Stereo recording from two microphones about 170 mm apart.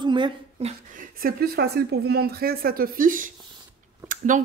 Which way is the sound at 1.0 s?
60° right (ahead or behind).